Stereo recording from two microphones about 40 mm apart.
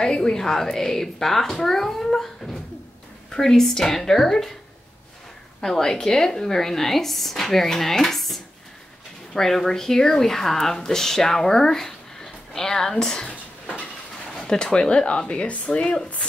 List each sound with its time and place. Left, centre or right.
0.0 s a child's voice: centre
5.6 s speech: centre
13.3 s a sound: left
14.3 s speech: centre
15.4 s speech: left